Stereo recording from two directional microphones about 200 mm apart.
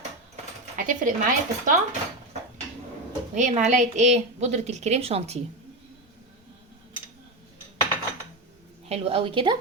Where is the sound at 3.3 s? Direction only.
35° right (ahead or behind).